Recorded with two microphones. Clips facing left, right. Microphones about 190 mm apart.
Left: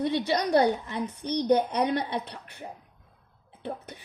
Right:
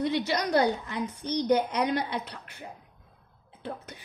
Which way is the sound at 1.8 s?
25° left (ahead or behind).